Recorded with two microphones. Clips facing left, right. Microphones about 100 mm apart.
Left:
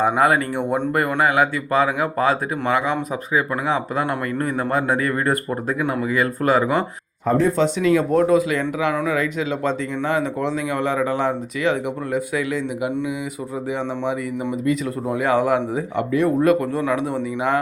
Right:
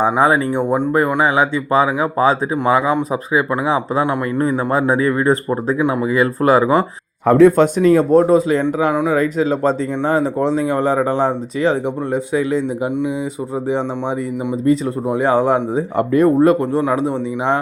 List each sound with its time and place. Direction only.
0.0 s speech: 25° right (ahead or behind)
4.0 s a man's voice: 15° right (ahead or behind)
6.1 s speech: 35° right (ahead or behind)
7.3 s speech: 65° right (ahead or behind); by 16.0 s 30° right (ahead or behind)
16.1 s speech: 40° right (ahead or behind)